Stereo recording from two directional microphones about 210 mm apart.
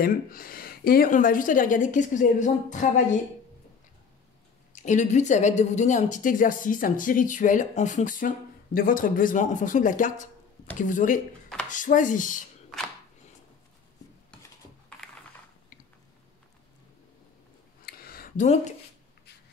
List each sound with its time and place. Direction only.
0.0 s a woman's voice: 45° left (ahead or behind)
4.8 s a woman's voice: 35° left (ahead or behind)
17.8 s a sound: 45° left (ahead or behind)